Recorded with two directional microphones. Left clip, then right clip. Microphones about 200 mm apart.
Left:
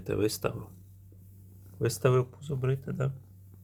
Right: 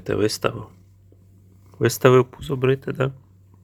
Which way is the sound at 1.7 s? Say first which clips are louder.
Right 11 dB; 20° right (ahead or behind).